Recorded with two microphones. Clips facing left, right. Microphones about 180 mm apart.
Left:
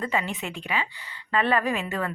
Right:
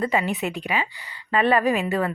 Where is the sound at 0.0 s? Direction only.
15° right (ahead or behind).